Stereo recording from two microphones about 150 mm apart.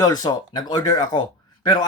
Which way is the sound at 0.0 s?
25° left (ahead or behind).